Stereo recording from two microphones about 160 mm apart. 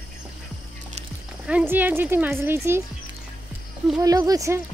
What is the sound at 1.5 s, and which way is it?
Speech, 10° right (ahead or behind).